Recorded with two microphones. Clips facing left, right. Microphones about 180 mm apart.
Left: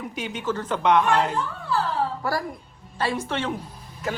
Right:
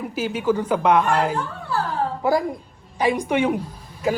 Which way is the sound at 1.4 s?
55° right (ahead or behind).